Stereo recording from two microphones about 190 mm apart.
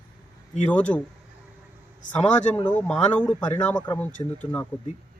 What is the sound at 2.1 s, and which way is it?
Speech, 5° left (ahead or behind).